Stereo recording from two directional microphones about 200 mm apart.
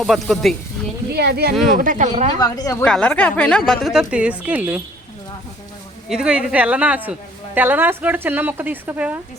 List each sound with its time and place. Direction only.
0.0 s speech: centre (ahead or behind)
1.1 s speech: 55° right (ahead or behind)
1.8 s speech: 40° right (ahead or behind)
2.4 s a woman's voice: 20° left (ahead or behind)
2.8 s a woman's voice: 5° left (ahead or behind)
6.1 s a woman's voice: 5° right (ahead or behind)